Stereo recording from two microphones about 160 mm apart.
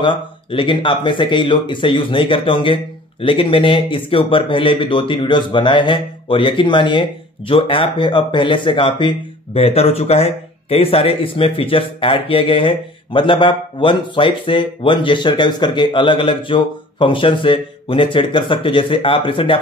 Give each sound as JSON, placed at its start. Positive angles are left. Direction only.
{"t": 0.0, "sound": "speech", "side_deg": 30}